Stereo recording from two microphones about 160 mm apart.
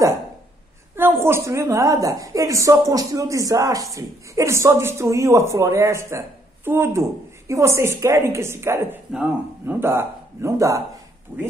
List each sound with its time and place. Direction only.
0.9 s a woman's voice: 15° right (ahead or behind)